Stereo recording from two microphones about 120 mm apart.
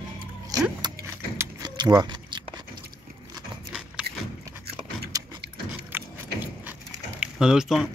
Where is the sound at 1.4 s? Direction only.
35° right (ahead or behind).